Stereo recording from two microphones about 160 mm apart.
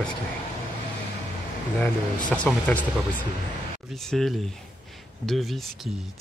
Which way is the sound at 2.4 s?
5° left (ahead or behind).